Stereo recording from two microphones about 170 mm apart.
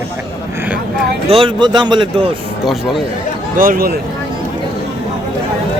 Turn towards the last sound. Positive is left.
turn(degrees=-55)  # may be behind; listen again after turning